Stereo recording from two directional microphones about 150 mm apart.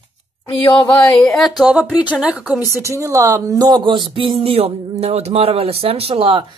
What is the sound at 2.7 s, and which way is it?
Speech, 20° right (ahead or behind).